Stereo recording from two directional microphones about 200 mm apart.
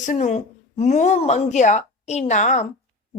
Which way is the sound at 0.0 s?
40° left (ahead or behind).